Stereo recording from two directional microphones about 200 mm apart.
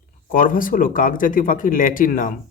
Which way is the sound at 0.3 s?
45° left (ahead or behind).